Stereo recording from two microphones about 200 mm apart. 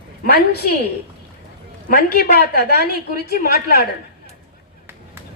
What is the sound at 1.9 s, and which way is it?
A woman's voice, 50° left (ahead or behind).